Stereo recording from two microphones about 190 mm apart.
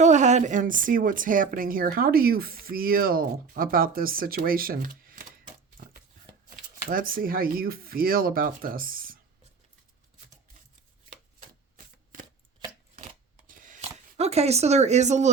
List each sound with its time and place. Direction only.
0.0 s a woman's voice: 40° right (ahead or behind)
6.8 s a woman's voice: 50° right (ahead or behind)
13.5 s a sound: 45° right (ahead or behind)